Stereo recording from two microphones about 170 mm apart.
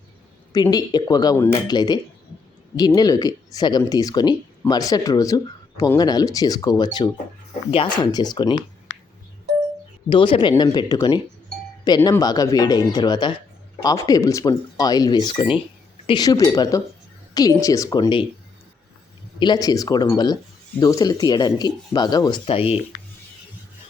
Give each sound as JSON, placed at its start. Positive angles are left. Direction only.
{"t": 0.5, "sound": "speech", "side_deg": 20}
{"t": 10.1, "sound": "speech", "side_deg": 30}
{"t": 19.4, "sound": "speech", "side_deg": 25}